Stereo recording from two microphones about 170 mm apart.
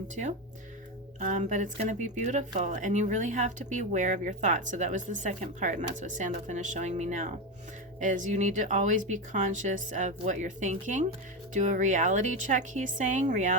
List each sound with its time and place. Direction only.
1.2 s speech: 45° right (ahead or behind)